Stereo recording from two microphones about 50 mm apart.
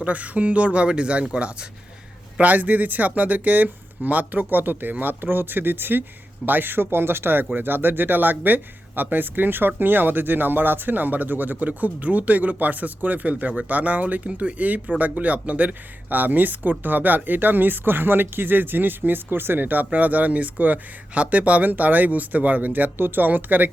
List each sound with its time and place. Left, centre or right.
0.0 s a man's voice: right